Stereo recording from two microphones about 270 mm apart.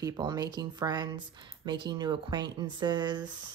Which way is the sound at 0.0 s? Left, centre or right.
Centre.